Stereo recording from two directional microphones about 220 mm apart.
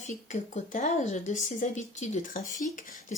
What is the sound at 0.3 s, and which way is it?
Speech, 35° left (ahead or behind).